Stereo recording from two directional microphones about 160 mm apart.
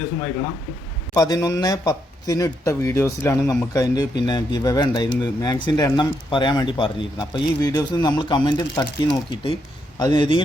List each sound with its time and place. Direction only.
1.1 s a man's voice: 25° left (ahead or behind)